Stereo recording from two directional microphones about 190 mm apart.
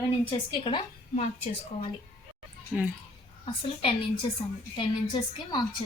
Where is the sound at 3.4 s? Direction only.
30° left (ahead or behind).